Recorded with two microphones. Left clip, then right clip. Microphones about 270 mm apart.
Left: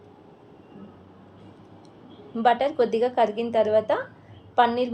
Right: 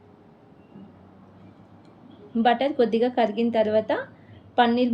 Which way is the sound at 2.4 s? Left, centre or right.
Left.